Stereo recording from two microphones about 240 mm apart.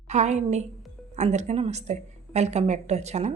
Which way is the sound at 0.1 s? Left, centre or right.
Right.